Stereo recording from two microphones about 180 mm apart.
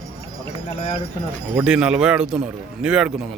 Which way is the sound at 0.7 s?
35° left (ahead or behind).